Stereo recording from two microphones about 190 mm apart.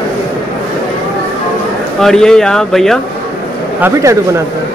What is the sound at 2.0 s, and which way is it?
Speech, 5° left (ahead or behind).